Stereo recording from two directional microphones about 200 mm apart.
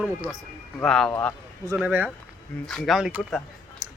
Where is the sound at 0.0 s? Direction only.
Centre (ahead or behind).